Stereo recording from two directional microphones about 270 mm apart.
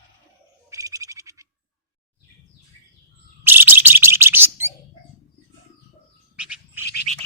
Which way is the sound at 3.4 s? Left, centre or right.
Centre.